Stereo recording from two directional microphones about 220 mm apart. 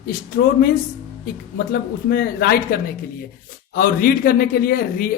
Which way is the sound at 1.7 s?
45° left (ahead or behind).